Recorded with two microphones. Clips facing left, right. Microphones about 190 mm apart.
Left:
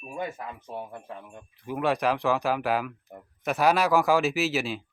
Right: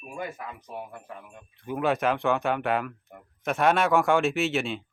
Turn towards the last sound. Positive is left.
turn(degrees=0)  # may be behind; listen again after turning